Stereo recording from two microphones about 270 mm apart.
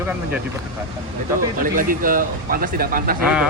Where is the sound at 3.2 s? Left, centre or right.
Centre.